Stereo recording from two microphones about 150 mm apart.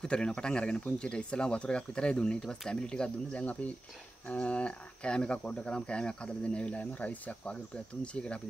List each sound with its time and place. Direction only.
0.0 s speech: 5° left (ahead or behind)